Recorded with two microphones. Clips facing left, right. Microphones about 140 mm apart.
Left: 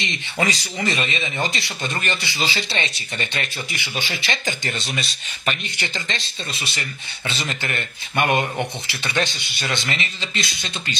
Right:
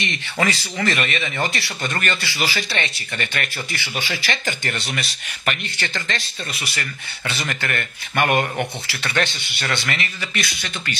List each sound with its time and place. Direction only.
0.0 s speech: 20° left (ahead or behind)